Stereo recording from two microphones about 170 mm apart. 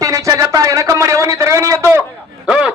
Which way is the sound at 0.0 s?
20° right (ahead or behind).